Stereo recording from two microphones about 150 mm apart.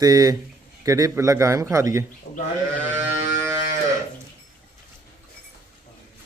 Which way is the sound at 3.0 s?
15° right (ahead or behind).